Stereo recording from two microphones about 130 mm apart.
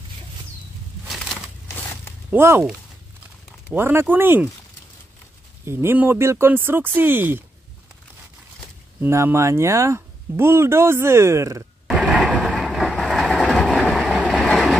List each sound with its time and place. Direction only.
1.0 s a sound: centre (ahead or behind)
1.7 s walk: 20° left (ahead or behind)
2.3 s speech: 20° right (ahead or behind)
3.7 s speech: 15° right (ahead or behind)
5.7 s speech: 20° right (ahead or behind)
9.0 s speech: 20° right (ahead or behind)
11.9 s vehicle: 5° right (ahead or behind)